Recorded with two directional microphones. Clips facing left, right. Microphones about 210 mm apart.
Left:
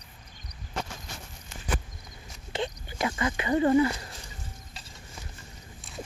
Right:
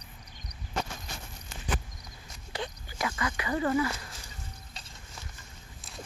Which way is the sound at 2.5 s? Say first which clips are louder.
Left 5 dB; 25° left (ahead or behind).